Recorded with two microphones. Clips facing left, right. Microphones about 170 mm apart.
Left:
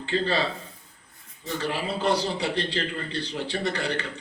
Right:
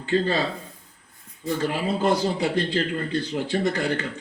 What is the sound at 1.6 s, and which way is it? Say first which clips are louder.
A man's voice: right 2 dB; 50° right (ahead or behind).